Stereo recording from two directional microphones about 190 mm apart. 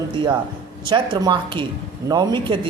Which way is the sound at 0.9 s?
25° right (ahead or behind).